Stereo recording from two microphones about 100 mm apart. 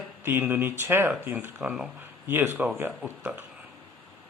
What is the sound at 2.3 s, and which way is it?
Speech, 20° right (ahead or behind).